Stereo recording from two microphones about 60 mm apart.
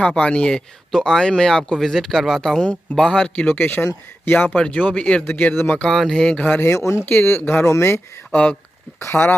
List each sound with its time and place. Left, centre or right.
0.0 s speech: centre
3.3 s speech: left
5.2 s speech: left
5.9 s speech: centre
6.3 s speech: left
6.6 s speech: left
7.1 s speech: left
8.3 s speech: centre
9.0 s speech: left